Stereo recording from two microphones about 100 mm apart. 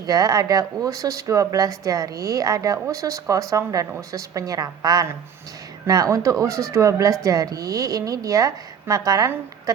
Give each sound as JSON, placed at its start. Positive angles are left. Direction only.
{"t": 0.0, "sound": "speech", "side_deg": -40}